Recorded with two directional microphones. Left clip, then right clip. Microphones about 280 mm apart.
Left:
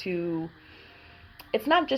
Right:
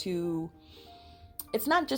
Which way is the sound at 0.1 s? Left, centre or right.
Right.